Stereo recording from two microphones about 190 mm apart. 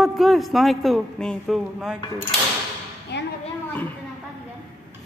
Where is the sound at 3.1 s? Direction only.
65° left (ahead or behind).